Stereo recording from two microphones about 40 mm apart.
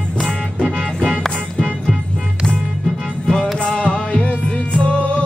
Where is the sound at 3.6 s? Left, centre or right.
Left.